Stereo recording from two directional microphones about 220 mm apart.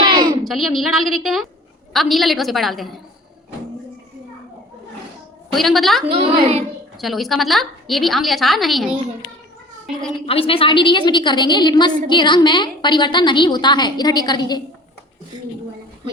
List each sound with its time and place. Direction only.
0.0 s a sound: 20° right (ahead or behind)
0.4 s a woman's voice: centre (ahead or behind)
5.5 s a woman's voice: centre (ahead or behind)
6.1 s a child's voice: 25° right (ahead or behind)
7.0 s a woman's voice: centre (ahead or behind)
10.2 s a woman's voice: 25° left (ahead or behind)